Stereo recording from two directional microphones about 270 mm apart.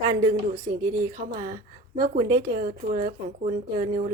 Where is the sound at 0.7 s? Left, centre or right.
Right.